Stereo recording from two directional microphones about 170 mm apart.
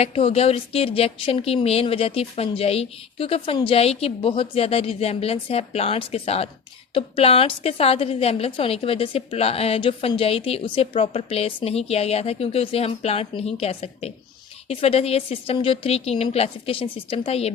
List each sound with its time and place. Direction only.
0.0 s a woman's voice: 35° left (ahead or behind)